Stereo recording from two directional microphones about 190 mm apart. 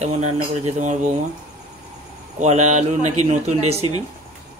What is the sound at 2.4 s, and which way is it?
Speech, 35° right (ahead or behind).